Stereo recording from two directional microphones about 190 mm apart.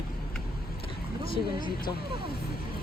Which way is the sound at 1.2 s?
50° left (ahead or behind).